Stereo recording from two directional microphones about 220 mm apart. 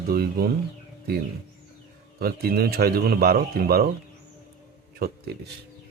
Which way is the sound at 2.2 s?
45° right (ahead or behind).